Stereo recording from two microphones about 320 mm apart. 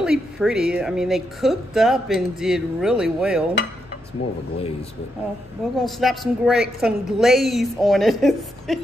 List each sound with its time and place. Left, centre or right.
0.0 s a woman's voice: centre
5.8 s a woman's voice: centre